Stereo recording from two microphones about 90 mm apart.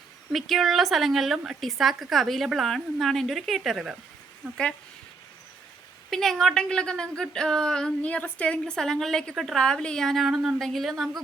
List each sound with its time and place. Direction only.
0.3 s a woman's voice: centre (ahead or behind)
6.1 s a woman's voice: 5° left (ahead or behind)